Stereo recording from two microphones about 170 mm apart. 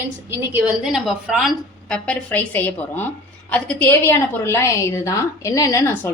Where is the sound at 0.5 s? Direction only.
5° right (ahead or behind).